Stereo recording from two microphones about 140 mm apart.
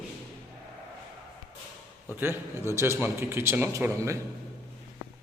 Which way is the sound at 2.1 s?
15° right (ahead or behind).